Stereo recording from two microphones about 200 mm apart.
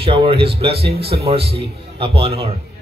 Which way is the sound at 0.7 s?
55° right (ahead or behind).